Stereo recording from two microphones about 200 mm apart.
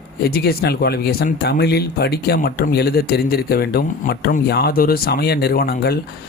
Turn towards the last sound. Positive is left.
turn(degrees=50)  # may be behind; listen again after turning